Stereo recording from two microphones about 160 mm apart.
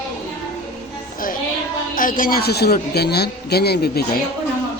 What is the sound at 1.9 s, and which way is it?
Speech, 60° left (ahead or behind).